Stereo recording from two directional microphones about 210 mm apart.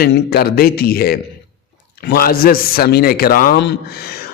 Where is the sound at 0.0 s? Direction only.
50° left (ahead or behind).